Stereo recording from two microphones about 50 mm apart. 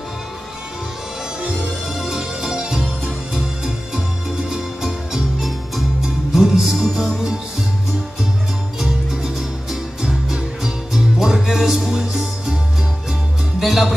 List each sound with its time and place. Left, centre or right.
2.0 s music: centre
8.7 s music: centre
13.6 s music: centre